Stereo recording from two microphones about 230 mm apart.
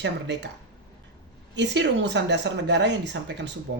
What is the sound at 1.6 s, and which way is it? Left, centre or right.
A woman's voice, right.